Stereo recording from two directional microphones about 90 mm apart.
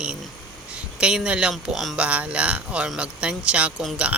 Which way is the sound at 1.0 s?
10° right (ahead or behind).